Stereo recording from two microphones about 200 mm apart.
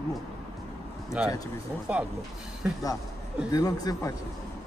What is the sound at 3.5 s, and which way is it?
Speech, 20° left (ahead or behind).